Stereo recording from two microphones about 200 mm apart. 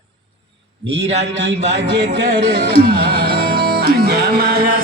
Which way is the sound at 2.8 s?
50° right (ahead or behind).